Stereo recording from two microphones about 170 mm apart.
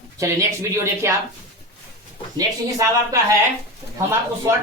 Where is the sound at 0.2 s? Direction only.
15° right (ahead or behind).